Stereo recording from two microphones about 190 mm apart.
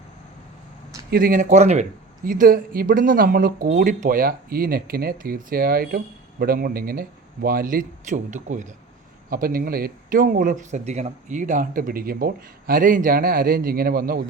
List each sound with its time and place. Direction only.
1.1 s speech: 45° right (ahead or behind)